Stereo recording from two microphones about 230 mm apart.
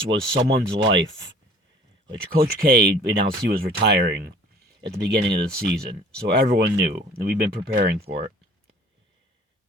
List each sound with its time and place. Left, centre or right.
0.3 s speech: right
2.0 s speech: right